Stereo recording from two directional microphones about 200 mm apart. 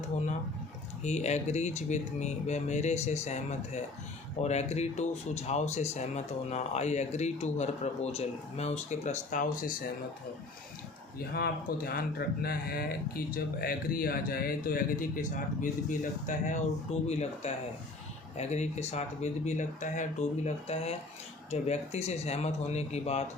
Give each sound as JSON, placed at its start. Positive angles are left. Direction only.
{"t": 1.0, "sound": "speech", "side_deg": 35}
{"t": 11.3, "sound": "speech", "side_deg": 50}